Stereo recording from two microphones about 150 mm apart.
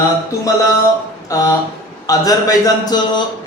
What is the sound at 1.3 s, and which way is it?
Speech, 25° left (ahead or behind).